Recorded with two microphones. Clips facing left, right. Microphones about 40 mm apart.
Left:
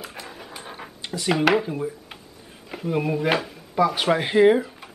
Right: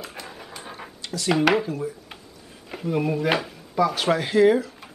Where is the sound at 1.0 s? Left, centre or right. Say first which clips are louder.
Left 1 dB; left.